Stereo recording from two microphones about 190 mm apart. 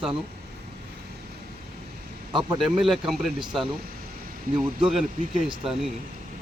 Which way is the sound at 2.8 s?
Centre (ahead or behind).